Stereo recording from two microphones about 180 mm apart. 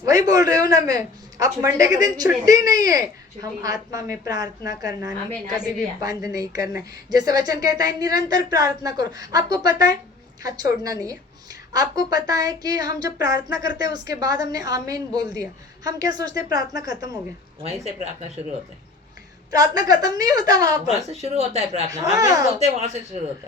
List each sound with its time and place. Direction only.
0.0 s speech: 20° right (ahead or behind)
17.6 s speech: 35° right (ahead or behind)
19.5 s speech: 20° right (ahead or behind)
21.1 s speech: 35° right (ahead or behind)
22.1 s speech: 20° right (ahead or behind)
22.5 s speech: 40° right (ahead or behind)